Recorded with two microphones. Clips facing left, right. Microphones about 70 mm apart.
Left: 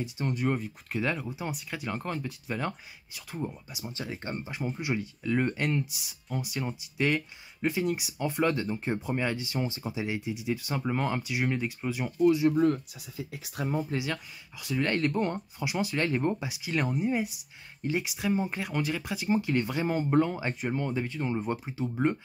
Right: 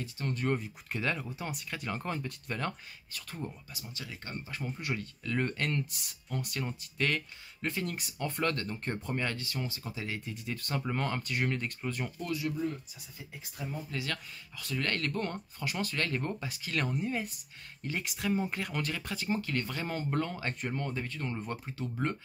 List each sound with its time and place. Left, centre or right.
0.0 s speech: centre
3.8 s speech: left; by 12.4 s centre
12.5 s speech: left
13.3 s speech: left
13.9 s speech: centre